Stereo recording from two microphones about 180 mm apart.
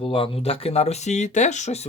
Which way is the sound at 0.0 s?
30° left (ahead or behind).